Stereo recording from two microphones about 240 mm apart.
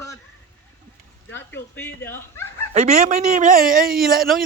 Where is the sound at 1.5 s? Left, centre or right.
Centre.